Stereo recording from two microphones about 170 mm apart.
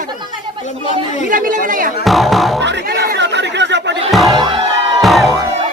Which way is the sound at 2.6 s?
90° right.